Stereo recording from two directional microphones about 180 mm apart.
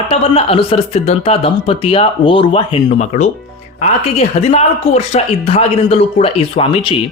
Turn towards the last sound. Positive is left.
turn(degrees=30)  # may be behind; listen again after turning